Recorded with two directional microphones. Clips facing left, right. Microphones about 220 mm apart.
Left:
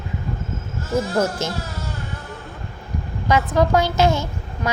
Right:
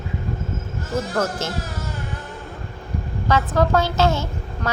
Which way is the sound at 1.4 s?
15° left (ahead or behind).